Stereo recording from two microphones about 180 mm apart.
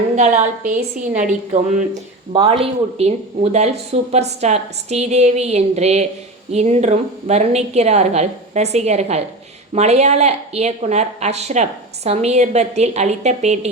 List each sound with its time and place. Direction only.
0.2 s a woman's voice: 40° right (ahead or behind)